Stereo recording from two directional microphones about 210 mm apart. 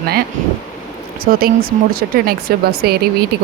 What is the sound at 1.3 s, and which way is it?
Speech, 35° right (ahead or behind).